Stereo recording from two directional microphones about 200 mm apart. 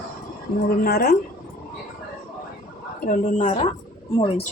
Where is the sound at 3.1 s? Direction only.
40° left (ahead or behind).